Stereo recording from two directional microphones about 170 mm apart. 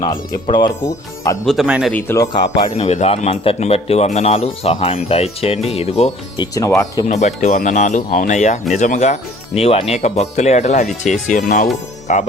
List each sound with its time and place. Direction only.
0.0 s speech: 30° left (ahead or behind)
1.5 s speech: 5° right (ahead or behind)
1.9 s speech: 10° left (ahead or behind)
2.7 s speech: 40° left (ahead or behind); by 7.0 s 20° left (ahead or behind)
7.1 s speech: 45° left (ahead or behind)